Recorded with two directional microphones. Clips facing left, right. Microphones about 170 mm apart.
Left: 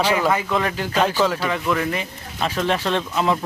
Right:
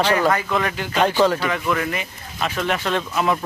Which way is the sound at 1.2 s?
Centre (ahead or behind).